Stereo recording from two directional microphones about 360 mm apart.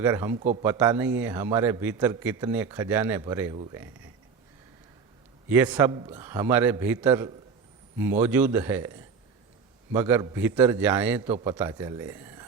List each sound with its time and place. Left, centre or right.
0.0 s a man's voice: centre
5.5 s a man's voice: centre